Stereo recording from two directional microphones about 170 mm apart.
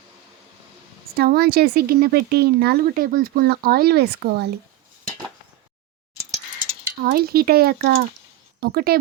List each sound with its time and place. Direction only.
1.1 s speech: 65° right (ahead or behind)
6.9 s speech: 60° right (ahead or behind)